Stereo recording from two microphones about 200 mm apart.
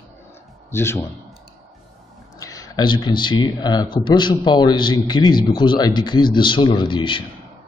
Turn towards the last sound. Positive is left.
turn(degrees=25)  # may be behind; listen again after turning